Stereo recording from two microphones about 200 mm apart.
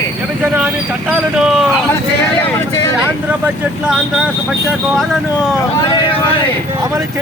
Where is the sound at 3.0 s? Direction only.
5° right (ahead or behind).